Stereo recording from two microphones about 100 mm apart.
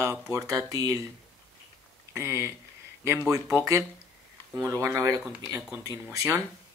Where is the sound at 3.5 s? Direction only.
30° right (ahead or behind).